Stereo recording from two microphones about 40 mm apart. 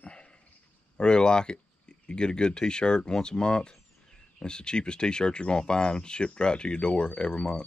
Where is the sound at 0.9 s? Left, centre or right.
Left.